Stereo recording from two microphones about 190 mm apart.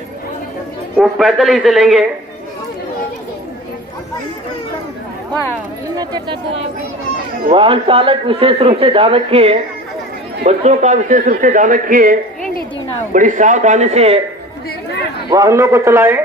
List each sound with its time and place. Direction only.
0.9 s speech: centre (ahead or behind)
5.9 s a man's voice: 25° right (ahead or behind)
15.2 s a man's voice: 20° right (ahead or behind)